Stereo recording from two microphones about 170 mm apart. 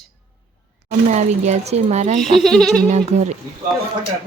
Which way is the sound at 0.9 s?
45° right (ahead or behind).